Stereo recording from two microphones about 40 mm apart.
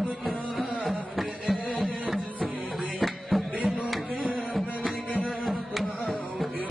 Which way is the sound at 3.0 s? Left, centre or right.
Centre.